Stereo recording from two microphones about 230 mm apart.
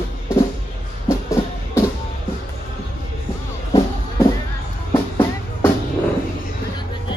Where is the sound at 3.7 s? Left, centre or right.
Centre.